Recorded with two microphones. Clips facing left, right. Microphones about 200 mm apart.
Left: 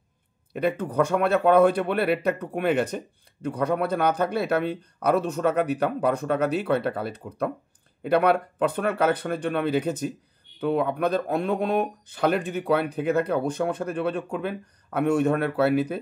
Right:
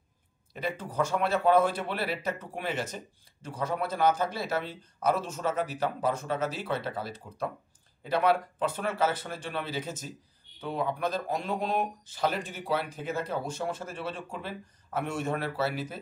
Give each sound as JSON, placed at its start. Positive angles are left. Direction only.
{"t": 0.5, "sound": "speech", "side_deg": 60}